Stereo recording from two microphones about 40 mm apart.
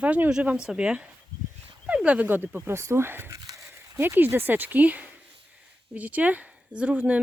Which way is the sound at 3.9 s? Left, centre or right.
Right.